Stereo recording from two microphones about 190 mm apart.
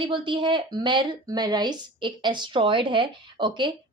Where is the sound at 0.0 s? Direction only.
25° right (ahead or behind).